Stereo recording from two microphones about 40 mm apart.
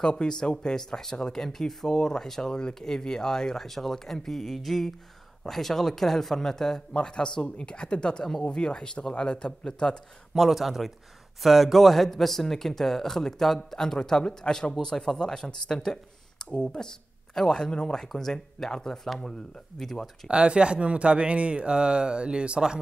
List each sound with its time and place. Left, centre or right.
0.0 s speech: left
1.4 s speech: centre
10.5 s speech: centre
19.0 s speech: centre
20.2 s speech: right